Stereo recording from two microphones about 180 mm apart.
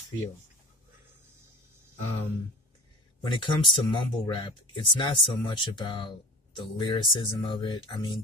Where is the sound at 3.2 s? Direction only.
25° left (ahead or behind).